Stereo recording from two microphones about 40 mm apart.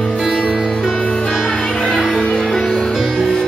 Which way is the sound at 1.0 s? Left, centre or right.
Left.